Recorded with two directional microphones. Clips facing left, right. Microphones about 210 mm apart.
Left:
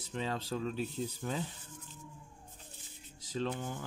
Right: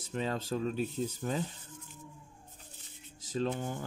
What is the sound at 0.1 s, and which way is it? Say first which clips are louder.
Speech: right 3 dB; 45° right (ahead or behind).